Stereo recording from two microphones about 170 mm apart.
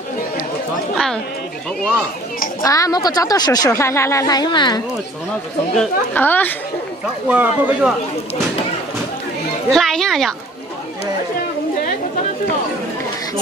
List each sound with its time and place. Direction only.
0.9 s chatter: 5° left (ahead or behind)
2.6 s speech: 20° left (ahead or behind)
5.8 s a woman's voice: 10° left (ahead or behind)
7.2 s speech: 10° right (ahead or behind)
9.7 s speech: centre (ahead or behind)